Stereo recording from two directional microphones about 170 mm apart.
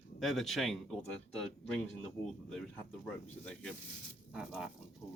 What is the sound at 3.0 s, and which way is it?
Speech, 5° left (ahead or behind).